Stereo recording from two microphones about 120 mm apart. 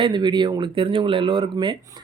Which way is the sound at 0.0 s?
40° right (ahead or behind).